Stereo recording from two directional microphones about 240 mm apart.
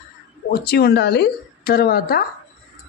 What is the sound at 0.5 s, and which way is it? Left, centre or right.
A man's voice, left.